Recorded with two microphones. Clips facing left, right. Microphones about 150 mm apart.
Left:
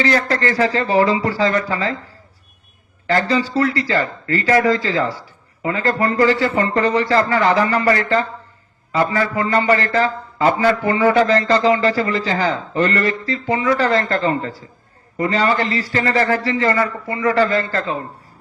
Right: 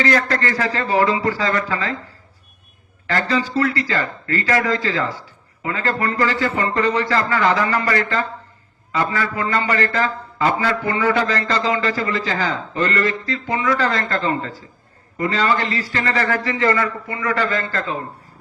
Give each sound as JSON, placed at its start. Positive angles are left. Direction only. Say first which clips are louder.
{"t": 0.0, "sound": "a man's voice", "louder": "left 1 dB", "side_deg": 30}
{"t": 3.1, "sound": "a man's voice", "louder": "left 3 dB", "side_deg": 25}